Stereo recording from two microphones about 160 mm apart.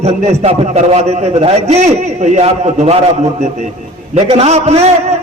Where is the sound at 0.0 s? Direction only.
40° right (ahead or behind).